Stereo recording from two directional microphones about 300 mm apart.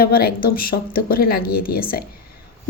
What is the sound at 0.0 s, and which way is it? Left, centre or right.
A woman's voice, left.